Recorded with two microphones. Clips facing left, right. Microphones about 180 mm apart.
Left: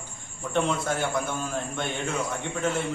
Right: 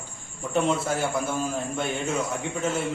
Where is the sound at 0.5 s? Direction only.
5° right (ahead or behind).